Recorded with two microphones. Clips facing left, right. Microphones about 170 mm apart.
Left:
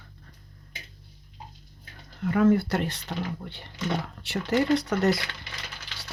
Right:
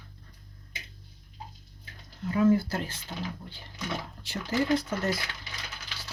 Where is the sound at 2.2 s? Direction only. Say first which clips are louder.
Left 2 dB; 65° left (ahead or behind).